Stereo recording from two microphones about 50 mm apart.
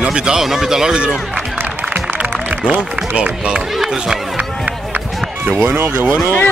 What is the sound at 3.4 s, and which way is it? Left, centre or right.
Speech, right.